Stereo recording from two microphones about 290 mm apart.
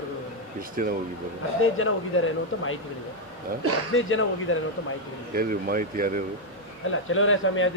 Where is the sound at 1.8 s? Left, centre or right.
Left.